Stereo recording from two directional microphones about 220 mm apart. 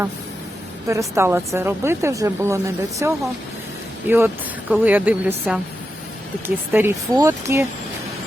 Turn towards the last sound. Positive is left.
turn(degrees=-10)  # may be behind; listen again after turning